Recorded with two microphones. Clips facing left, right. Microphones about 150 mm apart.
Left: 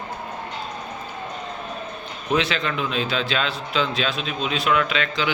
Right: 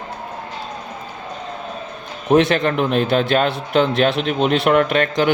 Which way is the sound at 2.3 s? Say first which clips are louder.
Right 8 dB; 50° right (ahead or behind).